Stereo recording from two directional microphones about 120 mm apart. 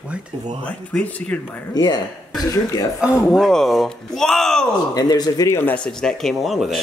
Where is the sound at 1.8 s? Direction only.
35° left (ahead or behind).